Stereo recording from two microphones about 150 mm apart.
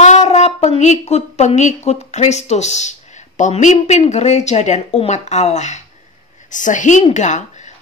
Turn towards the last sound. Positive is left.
turn(degrees=50)  # may be behind; listen again after turning